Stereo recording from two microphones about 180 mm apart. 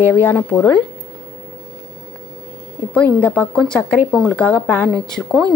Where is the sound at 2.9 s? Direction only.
10° left (ahead or behind).